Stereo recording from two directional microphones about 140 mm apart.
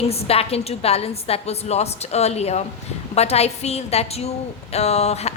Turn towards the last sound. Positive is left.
turn(degrees=50)  # may be behind; listen again after turning